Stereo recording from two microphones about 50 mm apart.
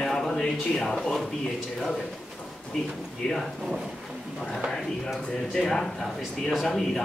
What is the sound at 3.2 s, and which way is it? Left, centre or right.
Speech, centre.